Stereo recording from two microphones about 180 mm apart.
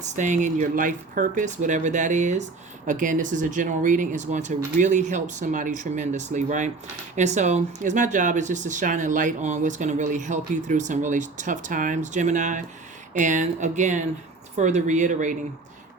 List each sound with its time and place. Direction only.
0.0 s speech: 45° right (ahead or behind)